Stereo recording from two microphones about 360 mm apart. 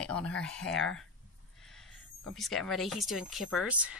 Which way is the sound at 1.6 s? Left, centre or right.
Centre.